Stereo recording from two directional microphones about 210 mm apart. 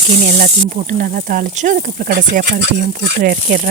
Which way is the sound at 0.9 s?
40° right (ahead or behind).